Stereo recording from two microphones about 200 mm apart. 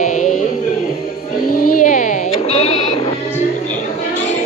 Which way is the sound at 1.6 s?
40° left (ahead or behind).